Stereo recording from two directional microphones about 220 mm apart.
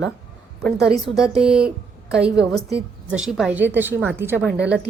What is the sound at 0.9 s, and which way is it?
Speech, centre (ahead or behind).